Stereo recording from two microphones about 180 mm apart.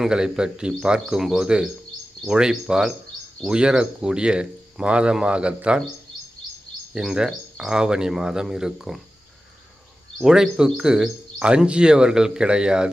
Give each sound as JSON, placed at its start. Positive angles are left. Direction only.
{"t": 0.0, "sound": "speech", "side_deg": -5}
{"t": 6.9, "sound": "speech", "side_deg": -5}
{"t": 10.2, "sound": "speech", "side_deg": -5}